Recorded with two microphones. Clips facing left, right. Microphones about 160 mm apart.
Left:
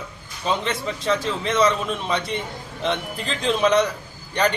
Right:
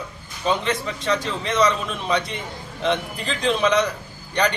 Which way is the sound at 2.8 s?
Centre (ahead or behind).